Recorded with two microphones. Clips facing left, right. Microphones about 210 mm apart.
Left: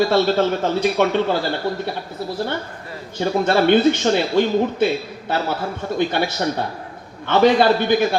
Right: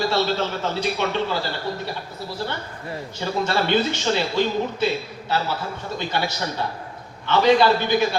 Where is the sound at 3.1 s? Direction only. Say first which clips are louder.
Left 6 dB; 55° left (ahead or behind).